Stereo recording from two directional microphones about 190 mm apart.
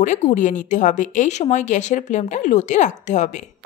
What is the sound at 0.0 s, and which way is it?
Speech, 40° left (ahead or behind).